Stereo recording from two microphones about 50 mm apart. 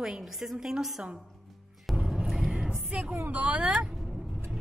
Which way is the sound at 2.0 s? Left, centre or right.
Centre.